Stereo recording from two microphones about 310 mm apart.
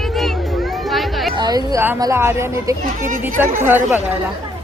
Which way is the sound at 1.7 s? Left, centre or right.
Centre.